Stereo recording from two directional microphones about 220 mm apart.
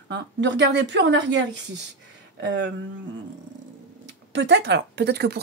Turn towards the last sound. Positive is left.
turn(degrees=-50)  # may be behind; listen again after turning